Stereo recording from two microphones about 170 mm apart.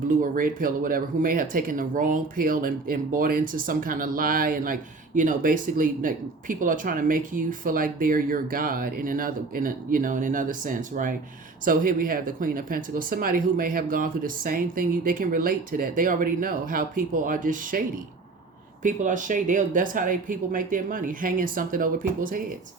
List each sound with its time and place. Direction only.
0.1 s speech: 55° right (ahead or behind)